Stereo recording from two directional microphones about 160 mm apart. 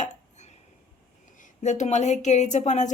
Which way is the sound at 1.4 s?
50° left (ahead or behind).